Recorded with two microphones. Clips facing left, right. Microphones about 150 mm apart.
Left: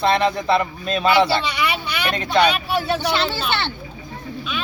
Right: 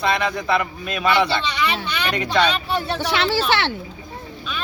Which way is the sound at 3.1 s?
90° right.